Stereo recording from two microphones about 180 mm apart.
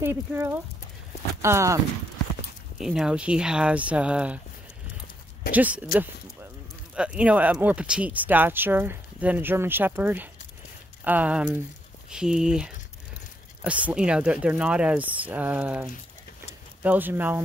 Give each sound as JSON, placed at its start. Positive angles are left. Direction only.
{"t": 0.0, "sound": "speech", "side_deg": -15}
{"t": 2.8, "sound": "speech", "side_deg": -5}
{"t": 5.5, "sound": "speech", "side_deg": -10}
{"t": 7.0, "sound": "speech", "side_deg": -5}